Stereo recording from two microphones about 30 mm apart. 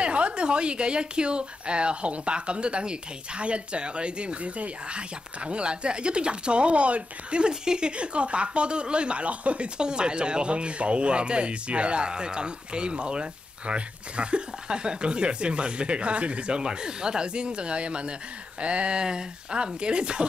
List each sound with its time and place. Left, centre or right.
0.0 s speech: right
7.6 s speech: right
8.0 s speech: right
9.8 s speech: right
12.1 s speech: right
16.6 s speech: right